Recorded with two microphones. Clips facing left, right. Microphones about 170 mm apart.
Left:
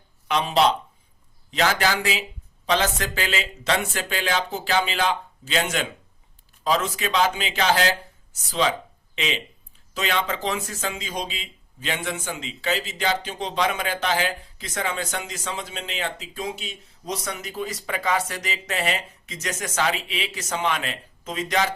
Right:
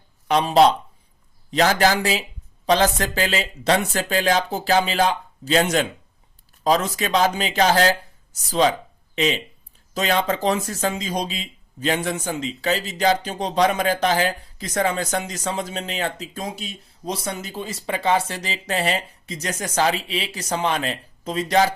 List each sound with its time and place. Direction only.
0.3 s speech: 40° right (ahead or behind)